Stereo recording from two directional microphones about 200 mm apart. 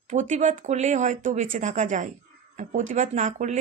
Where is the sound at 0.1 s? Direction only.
35° right (ahead or behind).